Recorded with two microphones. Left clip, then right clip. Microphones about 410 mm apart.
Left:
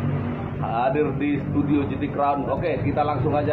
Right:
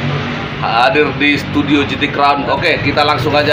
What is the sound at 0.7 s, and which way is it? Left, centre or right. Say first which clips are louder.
Speech: right 11 dB; left.